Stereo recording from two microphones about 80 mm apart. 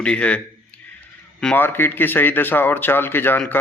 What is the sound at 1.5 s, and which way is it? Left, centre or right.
Speech, left.